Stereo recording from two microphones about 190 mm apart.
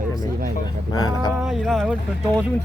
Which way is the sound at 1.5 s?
Centre (ahead or behind).